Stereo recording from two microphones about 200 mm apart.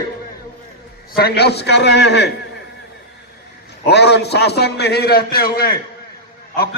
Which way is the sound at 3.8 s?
55° left (ahead or behind).